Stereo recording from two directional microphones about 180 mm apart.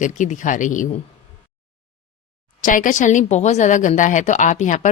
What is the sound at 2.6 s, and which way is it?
A woman's voice, 45° left (ahead or behind).